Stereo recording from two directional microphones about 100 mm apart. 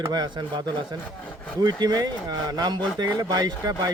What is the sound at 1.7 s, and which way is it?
Speech, 45° right (ahead or behind).